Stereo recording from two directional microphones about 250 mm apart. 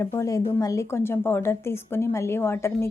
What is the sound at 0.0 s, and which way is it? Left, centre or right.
Speech, centre.